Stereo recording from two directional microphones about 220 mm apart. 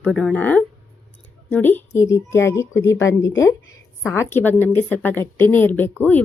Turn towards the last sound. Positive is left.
turn(degrees=10)  # may be behind; listen again after turning